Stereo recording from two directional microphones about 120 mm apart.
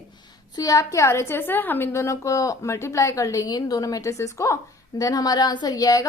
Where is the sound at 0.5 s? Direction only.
30° left (ahead or behind).